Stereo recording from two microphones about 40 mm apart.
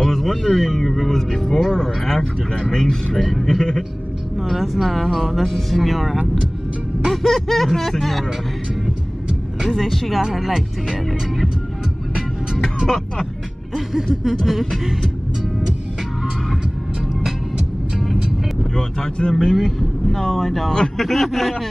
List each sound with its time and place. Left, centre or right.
0.0 s speech: centre
3.2 s speech: centre
3.4 s speech: centre
4.6 s speech: centre
9.6 s speech: centre
10.3 s a sound: centre
12.8 s speech: centre
13.7 s a sound: centre
17.1 s music: centre
18.6 s speech: centre
19.5 s speech: centre